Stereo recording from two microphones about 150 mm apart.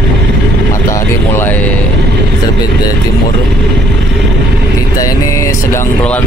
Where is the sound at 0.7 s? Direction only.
20° left (ahead or behind).